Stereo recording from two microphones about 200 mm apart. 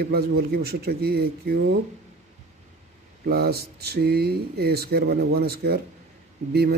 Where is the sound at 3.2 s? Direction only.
50° right (ahead or behind).